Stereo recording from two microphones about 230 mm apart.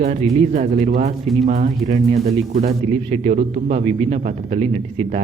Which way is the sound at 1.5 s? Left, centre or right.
Right.